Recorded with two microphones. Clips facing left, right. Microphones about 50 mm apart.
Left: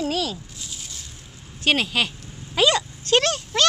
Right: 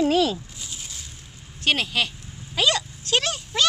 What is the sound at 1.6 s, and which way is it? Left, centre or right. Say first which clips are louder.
Speech: left 2 dB; centre.